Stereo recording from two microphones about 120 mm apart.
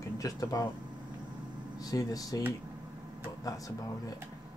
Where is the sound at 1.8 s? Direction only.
30° left (ahead or behind).